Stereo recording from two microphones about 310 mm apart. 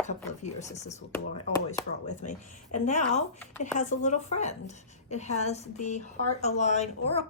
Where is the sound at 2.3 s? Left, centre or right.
Left.